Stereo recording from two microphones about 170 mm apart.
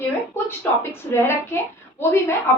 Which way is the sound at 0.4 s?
15° left (ahead or behind).